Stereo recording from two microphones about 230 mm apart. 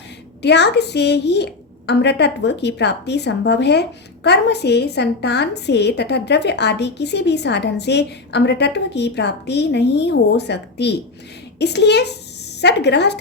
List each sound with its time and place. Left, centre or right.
0.4 s a woman's voice: left